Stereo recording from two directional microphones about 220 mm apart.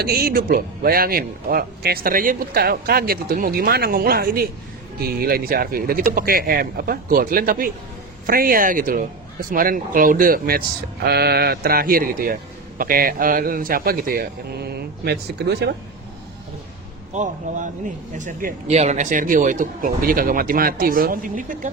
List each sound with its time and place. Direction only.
0.0 s a man's voice: 45° right (ahead or behind)
17.2 s speech: 35° right (ahead or behind)